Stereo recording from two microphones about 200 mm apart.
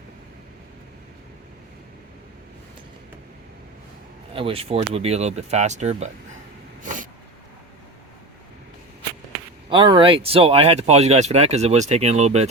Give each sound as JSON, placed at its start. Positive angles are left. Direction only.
{"t": 4.4, "sound": "speech", "side_deg": -30}
{"t": 6.8, "sound": "vehicle", "side_deg": -40}
{"t": 9.6, "sound": "speech", "side_deg": -25}